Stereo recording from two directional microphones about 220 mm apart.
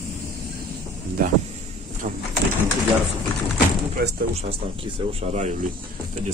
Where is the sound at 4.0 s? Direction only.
40° right (ahead or behind).